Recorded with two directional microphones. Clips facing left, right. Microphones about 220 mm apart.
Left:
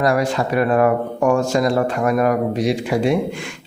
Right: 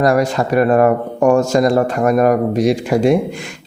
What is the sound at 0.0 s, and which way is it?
Speech, 45° right (ahead or behind).